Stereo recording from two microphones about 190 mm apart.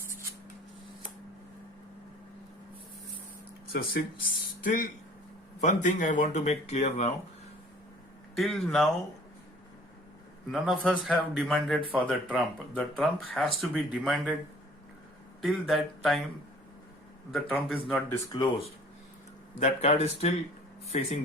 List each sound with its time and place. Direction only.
3.7 s speech: 50° left (ahead or behind); by 7.1 s 35° left (ahead or behind)
8.4 s speech: centre (ahead or behind)
10.5 s speech: centre (ahead or behind)
15.4 s speech: centre (ahead or behind)
17.8 s speech: 5° left (ahead or behind)
18.3 s speech: 20° left (ahead or behind)
19.5 s speech: 35° left (ahead or behind)